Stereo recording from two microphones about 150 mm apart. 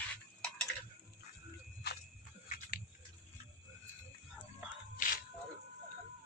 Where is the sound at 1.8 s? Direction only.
90° left.